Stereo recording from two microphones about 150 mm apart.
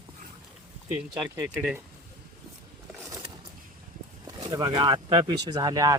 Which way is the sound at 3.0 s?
25° right (ahead or behind).